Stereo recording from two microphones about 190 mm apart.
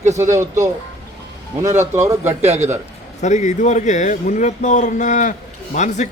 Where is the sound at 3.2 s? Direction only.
40° left (ahead or behind).